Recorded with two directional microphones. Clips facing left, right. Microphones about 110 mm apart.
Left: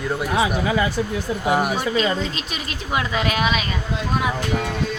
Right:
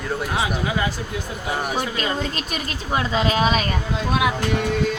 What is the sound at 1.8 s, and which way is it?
A woman's voice, 50° right (ahead or behind).